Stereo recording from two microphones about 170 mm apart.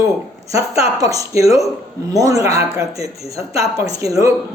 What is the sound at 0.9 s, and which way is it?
Speech, 20° right (ahead or behind).